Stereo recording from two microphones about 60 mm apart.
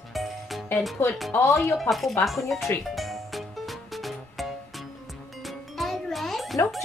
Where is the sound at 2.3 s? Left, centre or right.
Centre.